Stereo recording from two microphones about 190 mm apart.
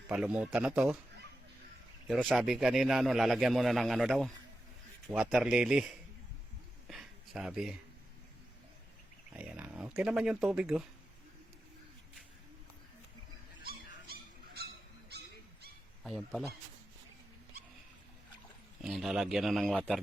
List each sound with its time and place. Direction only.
0.1 s a man's voice: 5° right (ahead or behind)
2.0 s a man's voice: 5° right (ahead or behind)
6.8 s a sound: centre (ahead or behind)
9.3 s a man's voice: 5° right (ahead or behind)
13.7 s dog: 55° right (ahead or behind)
16.0 s a man's voice: centre (ahead or behind)
18.8 s a man's voice: centre (ahead or behind)